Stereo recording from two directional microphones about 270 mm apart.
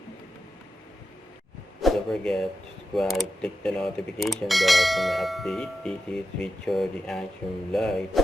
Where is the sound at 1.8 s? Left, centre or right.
Centre.